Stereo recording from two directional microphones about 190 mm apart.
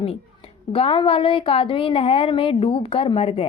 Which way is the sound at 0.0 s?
30° left (ahead or behind).